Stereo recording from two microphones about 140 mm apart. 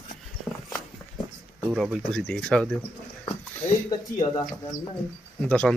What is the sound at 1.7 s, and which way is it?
Speech, 5° right (ahead or behind).